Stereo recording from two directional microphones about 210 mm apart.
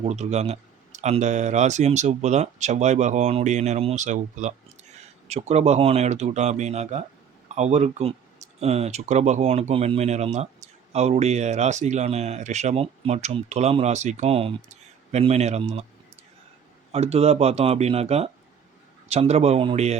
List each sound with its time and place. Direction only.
0.0 s speech: 30° right (ahead or behind)
16.9 s speech: 30° right (ahead or behind)